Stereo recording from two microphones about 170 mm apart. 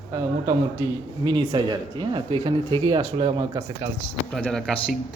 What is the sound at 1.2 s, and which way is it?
Speech, 25° right (ahead or behind).